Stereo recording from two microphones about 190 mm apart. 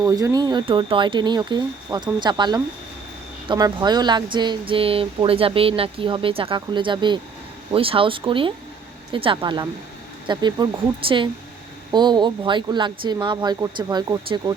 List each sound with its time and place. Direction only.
0.0 s speech: 20° right (ahead or behind)
11.9 s speech: 20° right (ahead or behind)